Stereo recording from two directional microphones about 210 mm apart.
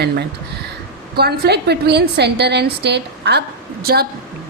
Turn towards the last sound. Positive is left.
turn(degrees=-45)  # may be behind; listen again after turning